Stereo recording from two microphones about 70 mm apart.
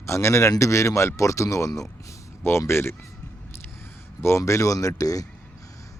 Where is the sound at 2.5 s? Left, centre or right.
Left.